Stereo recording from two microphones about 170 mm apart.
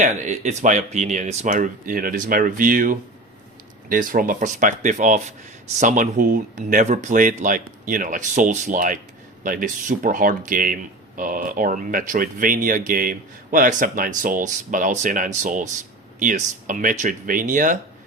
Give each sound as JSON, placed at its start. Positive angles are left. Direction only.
{"t": 0.0, "sound": "speech", "side_deg": -45}